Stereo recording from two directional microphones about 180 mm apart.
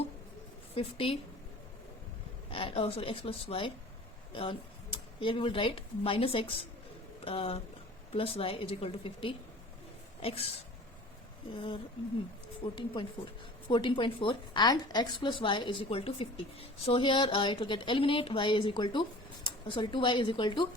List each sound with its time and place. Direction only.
0.7 s a woman's voice: 35° left (ahead or behind)
2.5 s a woman's voice: 30° left (ahead or behind)
11.5 s a woman's voice: 30° left (ahead or behind)